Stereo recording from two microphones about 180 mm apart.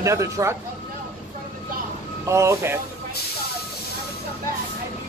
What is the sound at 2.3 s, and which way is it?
Speech, 15° right (ahead or behind).